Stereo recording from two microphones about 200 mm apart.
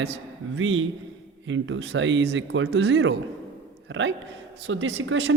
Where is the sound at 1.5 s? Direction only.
65° right (ahead or behind).